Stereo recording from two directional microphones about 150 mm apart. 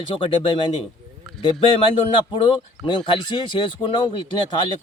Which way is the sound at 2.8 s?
35° left (ahead or behind).